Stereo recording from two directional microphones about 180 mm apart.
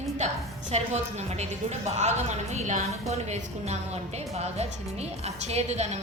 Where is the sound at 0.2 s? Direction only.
40° right (ahead or behind).